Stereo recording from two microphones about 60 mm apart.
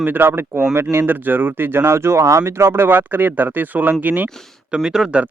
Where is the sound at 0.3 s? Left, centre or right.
Right.